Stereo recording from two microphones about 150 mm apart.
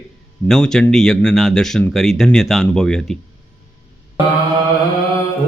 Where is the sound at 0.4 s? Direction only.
5° left (ahead or behind).